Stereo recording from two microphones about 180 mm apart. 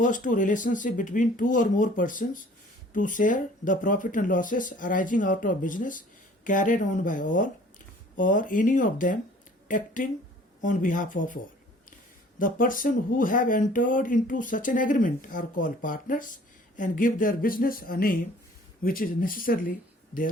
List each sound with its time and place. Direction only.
0.0 s speech: 45° left (ahead or behind)
12.4 s speech: 50° left (ahead or behind)